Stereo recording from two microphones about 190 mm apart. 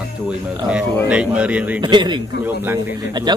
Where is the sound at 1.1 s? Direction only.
5° right (ahead or behind).